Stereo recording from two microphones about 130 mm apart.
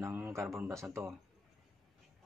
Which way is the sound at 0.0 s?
20° right (ahead or behind).